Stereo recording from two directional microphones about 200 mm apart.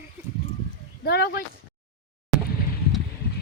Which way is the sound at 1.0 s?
50° left (ahead or behind).